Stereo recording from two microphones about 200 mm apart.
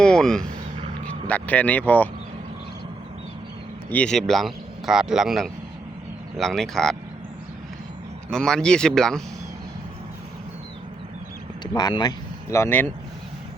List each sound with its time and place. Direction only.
0.0 s speech: 5° left (ahead or behind)
3.8 s speech: 5° left (ahead or behind)
8.3 s speech: 5° left (ahead or behind)
11.6 s speech: 20° left (ahead or behind)